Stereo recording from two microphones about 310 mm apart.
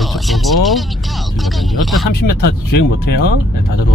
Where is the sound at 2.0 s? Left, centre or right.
Left.